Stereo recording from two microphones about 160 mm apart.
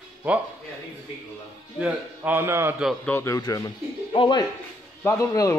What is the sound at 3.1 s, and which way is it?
A man's voice, 15° left (ahead or behind).